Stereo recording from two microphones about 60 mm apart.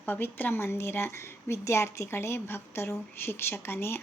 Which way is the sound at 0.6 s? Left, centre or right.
Left.